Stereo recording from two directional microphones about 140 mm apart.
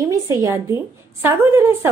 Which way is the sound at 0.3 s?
20° right (ahead or behind).